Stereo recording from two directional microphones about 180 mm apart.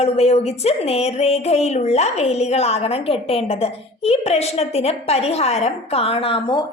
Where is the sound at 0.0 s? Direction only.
35° left (ahead or behind).